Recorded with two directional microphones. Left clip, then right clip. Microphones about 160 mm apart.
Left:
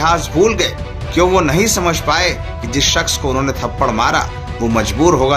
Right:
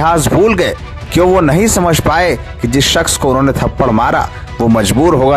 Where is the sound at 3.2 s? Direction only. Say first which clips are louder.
Right 6 dB; 50° right (ahead or behind).